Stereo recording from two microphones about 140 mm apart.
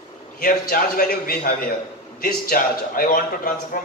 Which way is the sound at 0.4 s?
90° left.